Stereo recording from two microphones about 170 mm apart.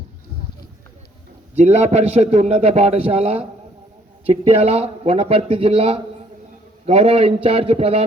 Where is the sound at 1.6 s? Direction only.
40° right (ahead or behind).